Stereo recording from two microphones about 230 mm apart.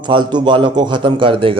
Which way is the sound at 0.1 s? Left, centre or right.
Centre.